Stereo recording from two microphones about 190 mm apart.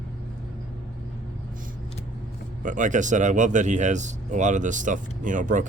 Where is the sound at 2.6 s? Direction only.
40° right (ahead or behind).